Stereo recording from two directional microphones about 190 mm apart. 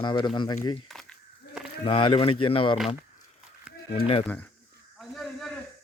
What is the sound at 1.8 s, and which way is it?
Speech, 30° left (ahead or behind).